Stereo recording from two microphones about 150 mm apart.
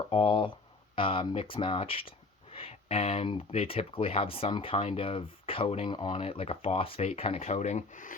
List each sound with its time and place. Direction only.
0.1 s speech: 35° left (ahead or behind); by 8.1 s 55° left (ahead or behind)